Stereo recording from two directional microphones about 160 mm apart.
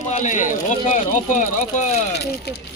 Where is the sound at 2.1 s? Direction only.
90° left.